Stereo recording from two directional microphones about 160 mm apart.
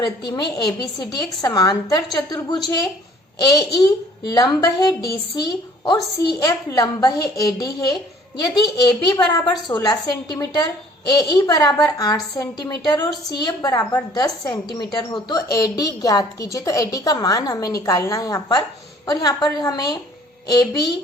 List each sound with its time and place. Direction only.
0.0 s a woman's voice: 25° left (ahead or behind)
3.4 s a woman's voice: 25° left (ahead or behind)